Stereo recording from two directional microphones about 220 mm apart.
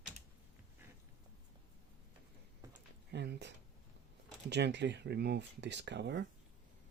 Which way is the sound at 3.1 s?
50° right (ahead or behind).